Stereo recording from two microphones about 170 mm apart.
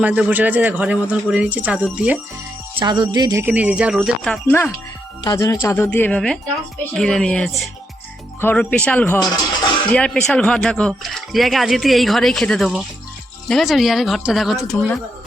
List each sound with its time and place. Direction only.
0.0 s speech: 10° right (ahead or behind)
2.7 s speech: 25° right (ahead or behind); by 4.7 s 10° left (ahead or behind)
5.2 s speech: 20° left (ahead or behind); by 14.8 s centre (ahead or behind)